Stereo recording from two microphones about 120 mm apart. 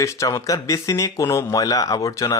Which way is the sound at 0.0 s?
25° left (ahead or behind).